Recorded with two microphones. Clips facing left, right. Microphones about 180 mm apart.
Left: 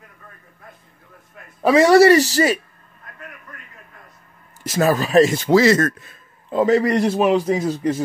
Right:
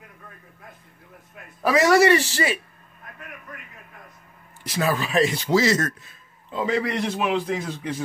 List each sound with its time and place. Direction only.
1.6 s speech: 30° left (ahead or behind)
4.6 s a man's voice: 45° left (ahead or behind)